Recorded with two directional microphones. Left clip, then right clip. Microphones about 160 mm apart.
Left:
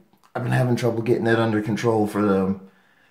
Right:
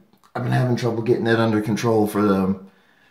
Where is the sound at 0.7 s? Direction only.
20° left (ahead or behind).